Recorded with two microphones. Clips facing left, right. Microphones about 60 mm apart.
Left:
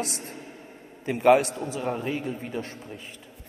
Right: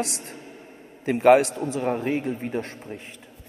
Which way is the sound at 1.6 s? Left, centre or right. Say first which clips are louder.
Right 4 dB; right.